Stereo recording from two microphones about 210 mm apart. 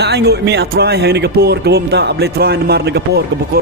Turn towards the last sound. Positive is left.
turn(degrees=-50)  # may be behind; listen again after turning